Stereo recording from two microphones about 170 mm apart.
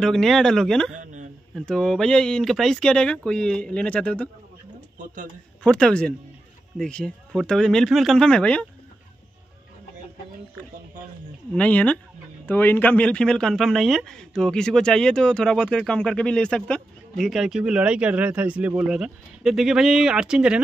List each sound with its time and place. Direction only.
0.0 s a man's voice: centre (ahead or behind)
4.9 s speech: 50° right (ahead or behind)
5.6 s a man's voice: 5° left (ahead or behind)
11.5 s a man's voice: 10° left (ahead or behind)